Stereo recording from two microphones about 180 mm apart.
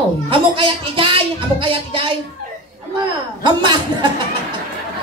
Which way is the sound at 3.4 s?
25° right (ahead or behind).